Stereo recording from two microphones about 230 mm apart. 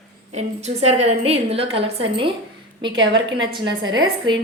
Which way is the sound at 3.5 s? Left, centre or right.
Centre.